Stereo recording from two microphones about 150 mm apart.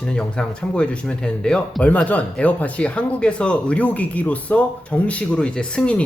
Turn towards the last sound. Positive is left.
turn(degrees=5)  # may be behind; listen again after turning